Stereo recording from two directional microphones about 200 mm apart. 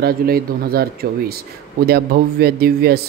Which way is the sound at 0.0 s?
50° right (ahead or behind).